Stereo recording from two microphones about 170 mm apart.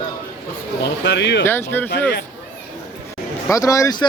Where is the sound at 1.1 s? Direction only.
90° left.